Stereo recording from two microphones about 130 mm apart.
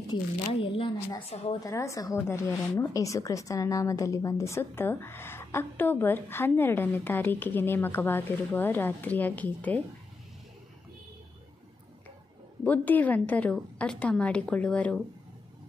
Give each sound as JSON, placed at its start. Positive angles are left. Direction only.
{"t": 0.1, "sound": "speech", "side_deg": 40}
{"t": 1.6, "sound": "speech", "side_deg": 25}
{"t": 12.6, "sound": "speech", "side_deg": 10}